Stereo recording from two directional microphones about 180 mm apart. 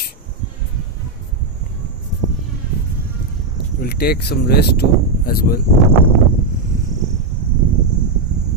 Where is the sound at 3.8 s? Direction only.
60° left (ahead or behind).